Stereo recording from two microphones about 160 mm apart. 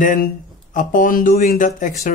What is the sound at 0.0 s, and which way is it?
Speech, 55° left (ahead or behind).